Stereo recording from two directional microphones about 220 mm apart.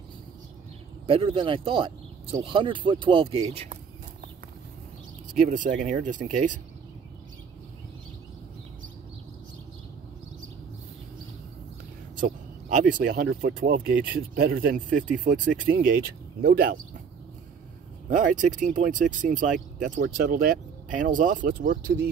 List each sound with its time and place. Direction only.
1.0 s speech: 25° right (ahead or behind)
5.4 s speech: 35° right (ahead or behind)
12.2 s speech: 35° right (ahead or behind)
18.1 s speech: 35° right (ahead or behind)